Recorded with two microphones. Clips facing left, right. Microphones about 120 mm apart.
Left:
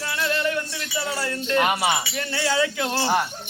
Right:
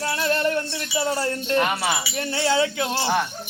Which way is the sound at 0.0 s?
35° right (ahead or behind).